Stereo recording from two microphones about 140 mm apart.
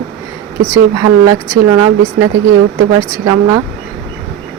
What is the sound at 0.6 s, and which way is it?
Speech, 20° right (ahead or behind).